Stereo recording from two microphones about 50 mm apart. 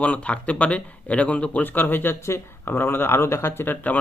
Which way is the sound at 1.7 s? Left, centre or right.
Left.